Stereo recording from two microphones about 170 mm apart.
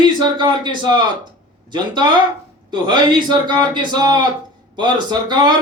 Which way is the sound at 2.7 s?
30° right (ahead or behind).